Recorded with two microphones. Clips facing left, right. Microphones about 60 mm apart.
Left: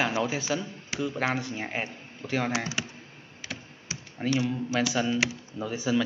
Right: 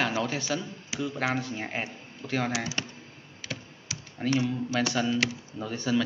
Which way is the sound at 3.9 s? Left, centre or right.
Left.